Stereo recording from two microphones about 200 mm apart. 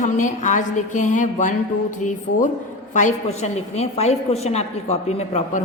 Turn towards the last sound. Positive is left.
turn(degrees=35)  # may be behind; listen again after turning